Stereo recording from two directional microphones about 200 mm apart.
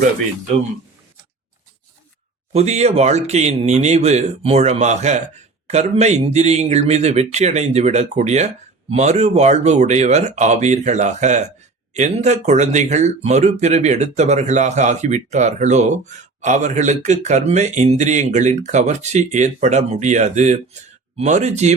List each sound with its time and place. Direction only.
2.5 s speech: 35° right (ahead or behind)